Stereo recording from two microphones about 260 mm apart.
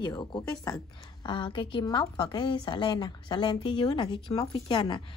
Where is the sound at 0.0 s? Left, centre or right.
Centre.